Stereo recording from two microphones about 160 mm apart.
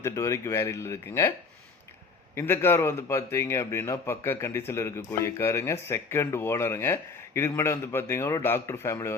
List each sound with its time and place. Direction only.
0.0 s a man's voice: 20° left (ahead or behind)
2.3 s a man's voice: 15° left (ahead or behind)